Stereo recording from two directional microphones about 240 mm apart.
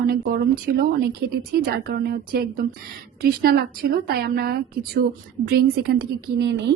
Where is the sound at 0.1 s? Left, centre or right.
Right.